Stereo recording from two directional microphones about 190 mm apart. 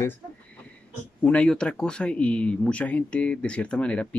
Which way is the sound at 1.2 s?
5° left (ahead or behind).